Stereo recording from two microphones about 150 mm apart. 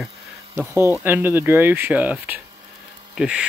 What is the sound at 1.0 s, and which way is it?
Speech, 15° right (ahead or behind).